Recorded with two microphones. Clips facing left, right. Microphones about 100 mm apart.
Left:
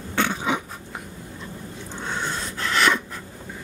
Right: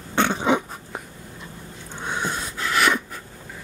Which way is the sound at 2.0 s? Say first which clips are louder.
Right 2 dB; 15° right (ahead or behind).